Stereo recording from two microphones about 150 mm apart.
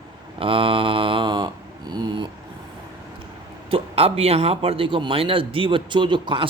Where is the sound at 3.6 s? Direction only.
40° right (ahead or behind).